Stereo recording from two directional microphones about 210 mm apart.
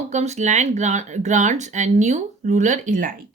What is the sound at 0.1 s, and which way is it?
Speech, 30° right (ahead or behind).